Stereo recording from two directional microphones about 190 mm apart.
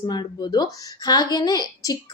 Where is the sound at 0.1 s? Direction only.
20° left (ahead or behind).